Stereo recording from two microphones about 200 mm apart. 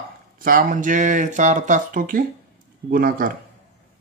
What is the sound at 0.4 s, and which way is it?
Speech, 45° right (ahead or behind).